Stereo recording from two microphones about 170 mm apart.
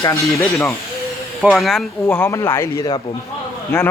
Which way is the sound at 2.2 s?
15° left (ahead or behind).